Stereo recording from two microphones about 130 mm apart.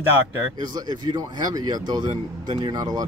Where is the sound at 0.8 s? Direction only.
30° right (ahead or behind).